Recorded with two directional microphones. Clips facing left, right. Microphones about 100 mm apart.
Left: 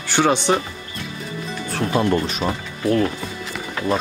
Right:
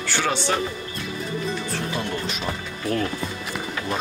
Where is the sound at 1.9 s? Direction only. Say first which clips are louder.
Left 8 dB; 45° left (ahead or behind).